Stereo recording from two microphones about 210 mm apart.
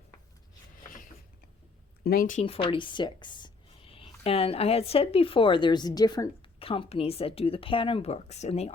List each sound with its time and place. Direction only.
2.0 s speech: 40° left (ahead or behind)
2.4 s a woman's voice: 25° left (ahead or behind)